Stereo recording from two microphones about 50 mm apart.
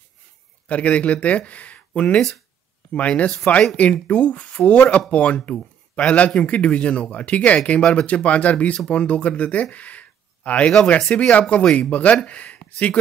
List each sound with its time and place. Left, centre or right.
0.7 s speech: left